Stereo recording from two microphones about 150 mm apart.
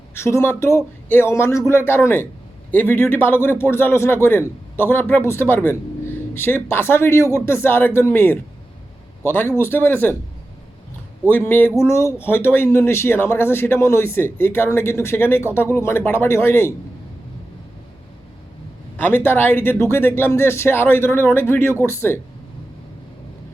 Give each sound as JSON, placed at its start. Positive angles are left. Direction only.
{"t": 0.1, "sound": "speech", "side_deg": 20}
{"t": 11.3, "sound": "speech", "side_deg": 15}
{"t": 18.9, "sound": "speech", "side_deg": 15}